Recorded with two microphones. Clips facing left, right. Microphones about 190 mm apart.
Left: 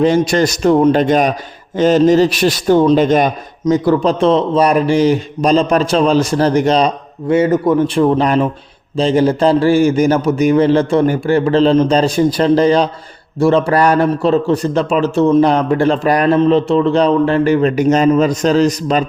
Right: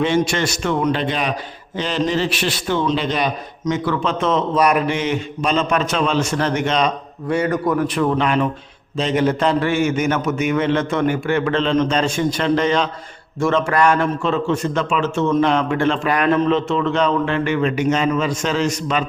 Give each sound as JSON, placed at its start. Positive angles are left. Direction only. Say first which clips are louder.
{"t": 0.0, "sound": "a man's voice", "louder": "left 6 dB", "side_deg": 35}